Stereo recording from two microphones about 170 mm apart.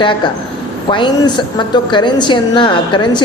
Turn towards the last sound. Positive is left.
turn(degrees=30)  # may be behind; listen again after turning